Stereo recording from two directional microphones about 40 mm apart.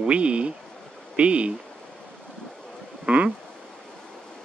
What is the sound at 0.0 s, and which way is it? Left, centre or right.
Speech, right.